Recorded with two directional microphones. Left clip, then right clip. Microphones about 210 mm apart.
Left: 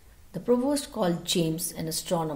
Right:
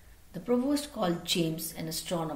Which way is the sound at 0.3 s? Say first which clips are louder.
Left 4 dB; 50° left (ahead or behind).